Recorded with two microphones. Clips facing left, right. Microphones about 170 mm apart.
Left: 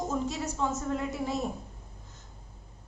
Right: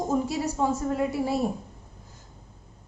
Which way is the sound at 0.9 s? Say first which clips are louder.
Right 6 dB; 10° right (ahead or behind).